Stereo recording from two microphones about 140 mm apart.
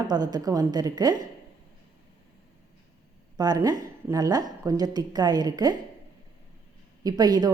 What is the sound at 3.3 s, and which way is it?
A woman's voice, 25° right (ahead or behind).